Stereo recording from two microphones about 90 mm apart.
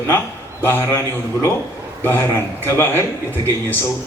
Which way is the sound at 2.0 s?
25° left (ahead or behind).